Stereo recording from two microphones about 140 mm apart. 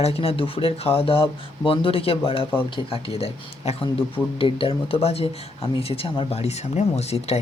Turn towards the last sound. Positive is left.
turn(degrees=50)  # may be behind; listen again after turning